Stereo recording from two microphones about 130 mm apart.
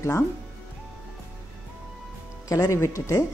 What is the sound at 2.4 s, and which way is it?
Speech, 25° left (ahead or behind).